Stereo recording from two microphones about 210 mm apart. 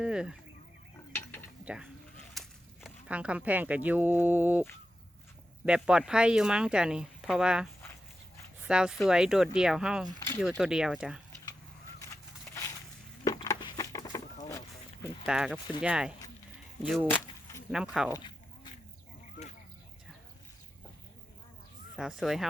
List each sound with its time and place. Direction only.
0.0 s speech: 5° right (ahead or behind)
1.6 s speech: 5° right (ahead or behind)
5.6 s speech: 5° right (ahead or behind)
10.2 s speech: 15° left (ahead or behind)
10.6 s speech: 5° right (ahead or behind)
12.5 s a sound: 10° left (ahead or behind)
15.3 s speech: 5° right (ahead or behind)
18.1 s a sound: 20° left (ahead or behind)
21.9 s speech: centre (ahead or behind)